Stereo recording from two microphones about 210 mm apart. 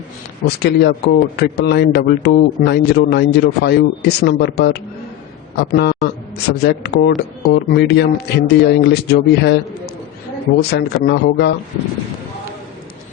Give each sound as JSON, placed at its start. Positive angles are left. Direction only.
{"t": 0.4, "sound": "a man's voice", "side_deg": 50}
{"t": 10.6, "sound": "speech", "side_deg": 50}